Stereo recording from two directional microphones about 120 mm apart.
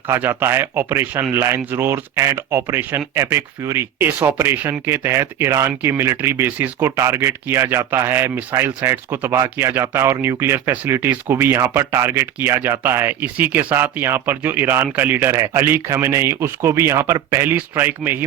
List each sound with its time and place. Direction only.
0.1 s speech: 20° right (ahead or behind)